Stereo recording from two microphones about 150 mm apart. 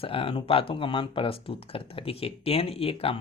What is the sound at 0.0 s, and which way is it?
Speech, 35° left (ahead or behind).